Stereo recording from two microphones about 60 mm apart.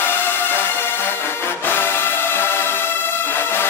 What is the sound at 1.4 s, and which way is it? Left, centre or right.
Music, left.